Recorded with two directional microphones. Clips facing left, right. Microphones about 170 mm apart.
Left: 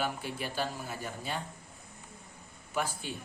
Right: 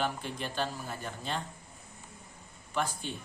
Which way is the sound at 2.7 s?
10° left (ahead or behind).